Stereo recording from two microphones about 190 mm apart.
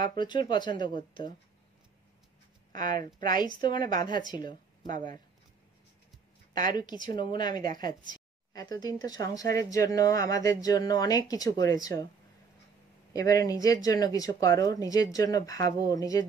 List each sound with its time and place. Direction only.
0.2 s speech: 25° left (ahead or behind)
2.7 s speech: 45° right (ahead or behind)
3.3 s speech: 25° left (ahead or behind)
6.7 s speech: 25° left (ahead or behind)
13.1 s speech: 20° left (ahead or behind)